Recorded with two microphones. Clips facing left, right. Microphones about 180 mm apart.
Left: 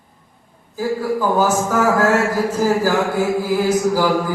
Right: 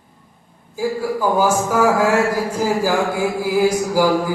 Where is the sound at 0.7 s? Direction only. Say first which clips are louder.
Left 1 dB; 10° right (ahead or behind).